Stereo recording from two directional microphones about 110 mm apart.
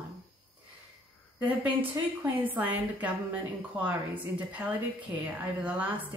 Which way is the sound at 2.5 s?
15° right (ahead or behind).